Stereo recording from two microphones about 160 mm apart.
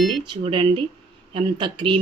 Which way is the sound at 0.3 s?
30° right (ahead or behind).